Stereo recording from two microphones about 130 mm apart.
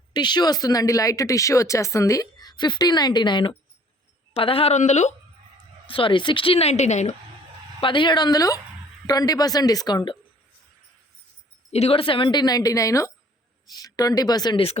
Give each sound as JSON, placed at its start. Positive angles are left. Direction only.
{"t": 0.1, "sound": "speech", "side_deg": 35}
{"t": 4.4, "sound": "a woman's voice", "side_deg": 45}
{"t": 4.8, "sound": "speech", "side_deg": 65}
{"t": 5.8, "sound": "a woman's voice", "side_deg": 40}
{"t": 7.8, "sound": "a woman's voice", "side_deg": 40}
{"t": 11.7, "sound": "a woman's voice", "side_deg": 50}